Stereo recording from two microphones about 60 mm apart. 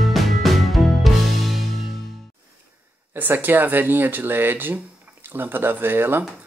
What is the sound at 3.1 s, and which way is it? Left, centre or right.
Speech, right.